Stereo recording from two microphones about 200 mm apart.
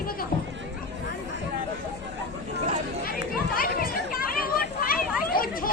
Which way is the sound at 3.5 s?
45° left (ahead or behind).